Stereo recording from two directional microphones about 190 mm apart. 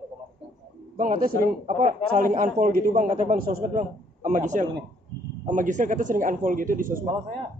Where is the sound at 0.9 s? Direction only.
45° right (ahead or behind).